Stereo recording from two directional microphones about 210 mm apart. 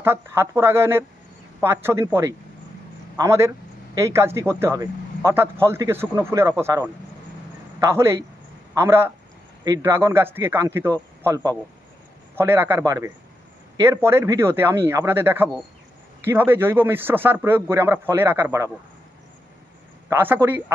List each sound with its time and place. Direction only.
0.0 s speech: 10° right (ahead or behind)
20.1 s speech: 10° right (ahead or behind)